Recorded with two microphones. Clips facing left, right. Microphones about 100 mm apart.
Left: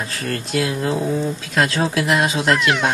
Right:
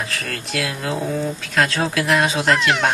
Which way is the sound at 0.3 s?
80° right.